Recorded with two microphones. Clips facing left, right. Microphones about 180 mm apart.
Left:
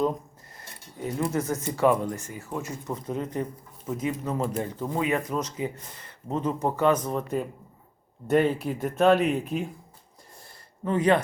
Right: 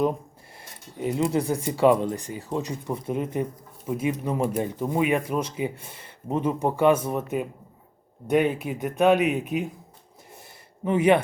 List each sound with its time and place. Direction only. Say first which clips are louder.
0.9 s speech: right 4 dB; 20° right (ahead or behind)
5.8 s speech: right 2 dB; 25° right (ahead or behind)
6.2 s speech: right 2 dB; 10° right (ahead or behind)
8.5 s speech: even; centre (ahead or behind)
8.9 s speech: right 1 dB; 15° right (ahead or behind)
10.8 s speech: right 3 dB; 10° right (ahead or behind)